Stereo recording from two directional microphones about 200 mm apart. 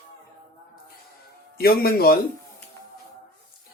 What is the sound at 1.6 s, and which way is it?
Speech, 50° left (ahead or behind).